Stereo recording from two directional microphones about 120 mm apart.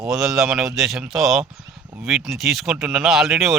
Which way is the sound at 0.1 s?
Centre (ahead or behind).